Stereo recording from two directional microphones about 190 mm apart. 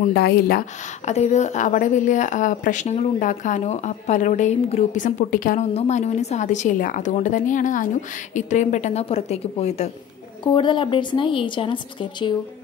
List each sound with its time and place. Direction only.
0.1 s speech: 55° left (ahead or behind)
1.0 s a woman's voice: 35° left (ahead or behind)